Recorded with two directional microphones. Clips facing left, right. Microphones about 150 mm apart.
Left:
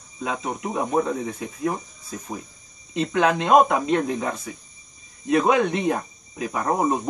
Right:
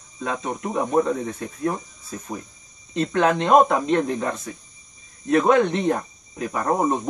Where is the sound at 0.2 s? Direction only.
5° left (ahead or behind).